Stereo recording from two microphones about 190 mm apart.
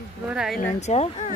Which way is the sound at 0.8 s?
35° left (ahead or behind).